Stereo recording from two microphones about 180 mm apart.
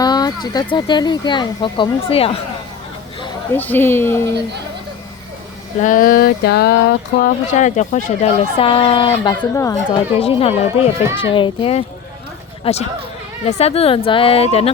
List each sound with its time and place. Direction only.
0.0 s speech: 20° left (ahead or behind)
3.5 s speech: 10° left (ahead or behind)
5.8 s a sound: 50° left (ahead or behind); by 7.3 s 65° left (ahead or behind)
7.5 s speech: 40° left (ahead or behind); by 9.7 s 20° left (ahead or behind)
10.2 s speech: 35° left (ahead or behind)